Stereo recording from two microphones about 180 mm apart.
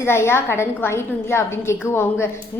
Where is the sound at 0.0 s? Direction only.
15° left (ahead or behind).